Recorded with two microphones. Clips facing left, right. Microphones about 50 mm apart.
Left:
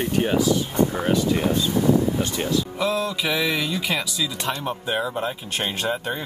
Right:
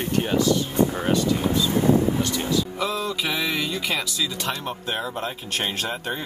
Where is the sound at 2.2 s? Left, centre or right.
Left.